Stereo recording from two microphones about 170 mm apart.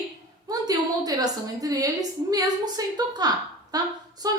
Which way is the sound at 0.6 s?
20° right (ahead or behind).